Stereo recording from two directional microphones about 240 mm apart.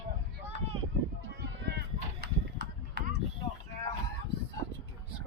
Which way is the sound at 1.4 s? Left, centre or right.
Right.